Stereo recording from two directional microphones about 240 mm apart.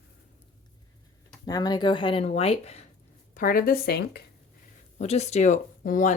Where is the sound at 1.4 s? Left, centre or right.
Centre; by 4.2 s left.